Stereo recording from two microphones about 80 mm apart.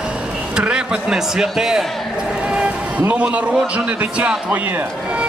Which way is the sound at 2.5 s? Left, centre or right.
Centre.